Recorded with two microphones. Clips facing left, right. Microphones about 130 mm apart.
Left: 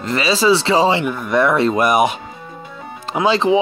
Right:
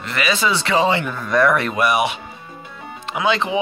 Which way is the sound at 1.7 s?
45° left (ahead or behind).